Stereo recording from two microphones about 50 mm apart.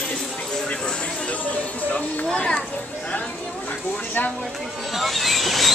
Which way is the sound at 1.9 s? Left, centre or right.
Centre.